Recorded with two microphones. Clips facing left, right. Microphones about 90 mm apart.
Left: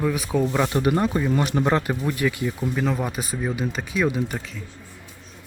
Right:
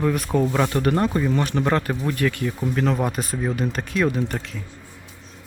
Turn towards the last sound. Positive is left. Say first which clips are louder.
# right 1 dB
turn(degrees=5)  # may be behind; listen again after turning